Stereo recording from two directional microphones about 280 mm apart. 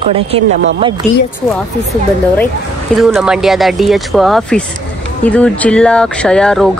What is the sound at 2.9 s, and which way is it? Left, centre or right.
Speech, centre.